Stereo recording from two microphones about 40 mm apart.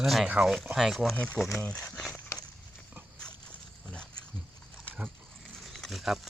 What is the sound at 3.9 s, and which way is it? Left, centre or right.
Pig, left.